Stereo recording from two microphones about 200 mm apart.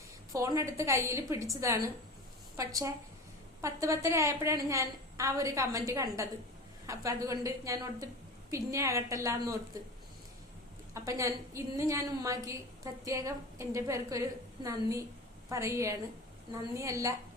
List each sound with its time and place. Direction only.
0.3 s a woman's voice: 15° right (ahead or behind)
2.6 s a woman's voice: 15° right (ahead or behind)
10.9 s a woman's voice: 15° right (ahead or behind)